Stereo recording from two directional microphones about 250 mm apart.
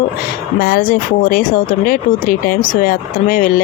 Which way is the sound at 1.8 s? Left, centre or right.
Left.